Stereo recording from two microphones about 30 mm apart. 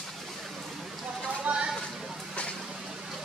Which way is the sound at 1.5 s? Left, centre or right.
Right.